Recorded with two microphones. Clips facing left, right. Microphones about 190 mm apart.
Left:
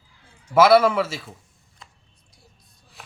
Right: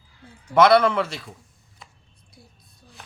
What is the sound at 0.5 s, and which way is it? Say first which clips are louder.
Speech: left 1 dB; 5° left (ahead or behind).